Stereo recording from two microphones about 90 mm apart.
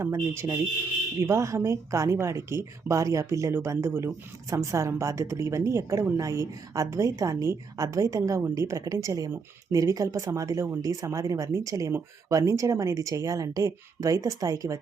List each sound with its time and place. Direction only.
0.0 s a woman's voice: 35° right (ahead or behind)